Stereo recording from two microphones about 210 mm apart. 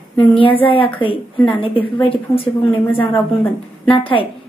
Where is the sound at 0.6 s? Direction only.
25° left (ahead or behind).